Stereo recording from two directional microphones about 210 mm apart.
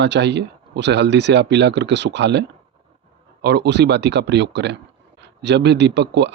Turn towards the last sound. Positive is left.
turn(degrees=-55)  # may be behind; listen again after turning